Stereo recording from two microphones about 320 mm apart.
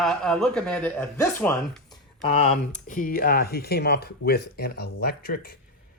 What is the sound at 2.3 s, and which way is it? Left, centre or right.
Speech, centre.